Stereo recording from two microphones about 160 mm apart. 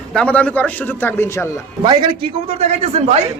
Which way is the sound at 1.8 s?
30° right (ahead or behind).